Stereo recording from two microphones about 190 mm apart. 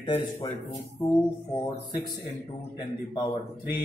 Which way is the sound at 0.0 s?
25° left (ahead or behind).